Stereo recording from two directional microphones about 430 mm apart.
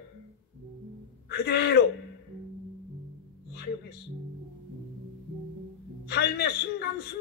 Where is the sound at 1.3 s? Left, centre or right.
Left.